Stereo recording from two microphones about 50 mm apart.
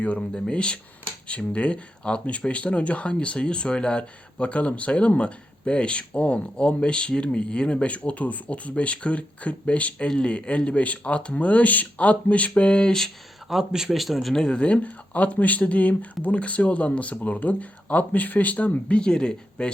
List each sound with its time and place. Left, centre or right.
0.0 s speech: left
13.5 s speech: centre
14.3 s speech: centre